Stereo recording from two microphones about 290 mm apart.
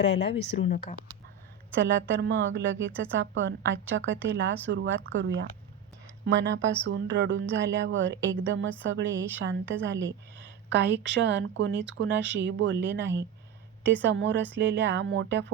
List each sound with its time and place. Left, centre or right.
0.0 s speech: left
2.0 s a woman's voice: right